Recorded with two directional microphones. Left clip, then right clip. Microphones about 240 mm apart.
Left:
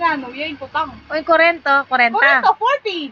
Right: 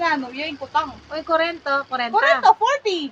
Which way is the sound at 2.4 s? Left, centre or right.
Right.